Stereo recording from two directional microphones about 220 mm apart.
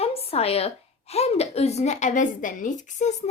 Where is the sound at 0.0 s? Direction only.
25° left (ahead or behind).